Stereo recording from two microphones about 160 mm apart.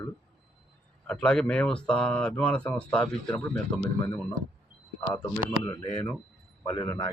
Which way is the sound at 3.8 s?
20° left (ahead or behind).